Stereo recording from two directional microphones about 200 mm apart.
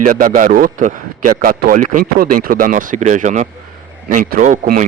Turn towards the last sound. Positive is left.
turn(degrees=-40)  # may be behind; listen again after turning